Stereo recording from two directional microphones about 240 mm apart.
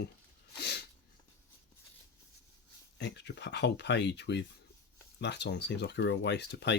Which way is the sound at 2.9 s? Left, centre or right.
Left.